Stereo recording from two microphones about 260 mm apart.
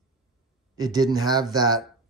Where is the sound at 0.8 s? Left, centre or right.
Centre.